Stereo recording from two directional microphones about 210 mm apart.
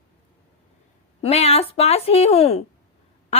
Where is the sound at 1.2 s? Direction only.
30° left (ahead or behind).